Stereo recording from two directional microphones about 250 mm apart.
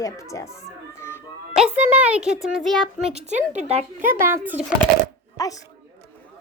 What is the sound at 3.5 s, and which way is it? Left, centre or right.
Speech, right.